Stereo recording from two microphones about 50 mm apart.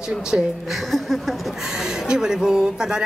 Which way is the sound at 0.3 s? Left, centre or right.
Right.